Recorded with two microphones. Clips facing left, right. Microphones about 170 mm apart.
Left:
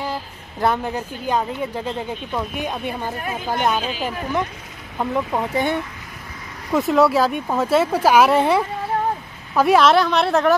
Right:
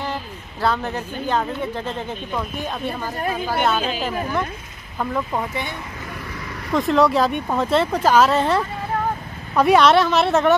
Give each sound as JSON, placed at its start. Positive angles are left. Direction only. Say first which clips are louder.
{"t": 0.0, "sound": "a woman's voice", "louder": "even", "side_deg": 15}
{"t": 4.9, "sound": "speech", "louder": "left 2 dB", "side_deg": 15}
{"t": 5.5, "sound": "speech", "louder": "left 8 dB", "side_deg": 45}
{"t": 6.7, "sound": "speech", "louder": "left 1 dB", "side_deg": 5}
{"t": 9.6, "sound": "a woman's voice", "louder": "even", "side_deg": 0}